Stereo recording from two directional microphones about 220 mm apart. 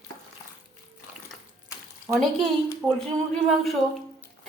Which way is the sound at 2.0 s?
Centre (ahead or behind).